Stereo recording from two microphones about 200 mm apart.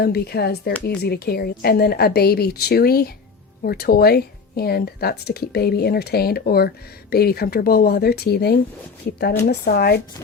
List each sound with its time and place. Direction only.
0.0 s speech: 50° left (ahead or behind)